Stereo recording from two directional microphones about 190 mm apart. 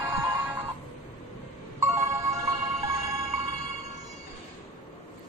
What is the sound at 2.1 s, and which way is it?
Music, 15° right (ahead or behind).